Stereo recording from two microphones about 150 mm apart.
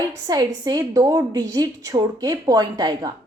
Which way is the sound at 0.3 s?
25° right (ahead or behind).